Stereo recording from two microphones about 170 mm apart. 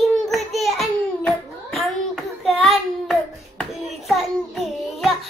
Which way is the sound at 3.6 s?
Centre (ahead or behind).